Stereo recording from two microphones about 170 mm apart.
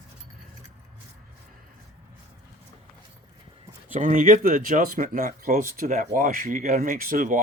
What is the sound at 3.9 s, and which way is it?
Speech, 50° right (ahead or behind).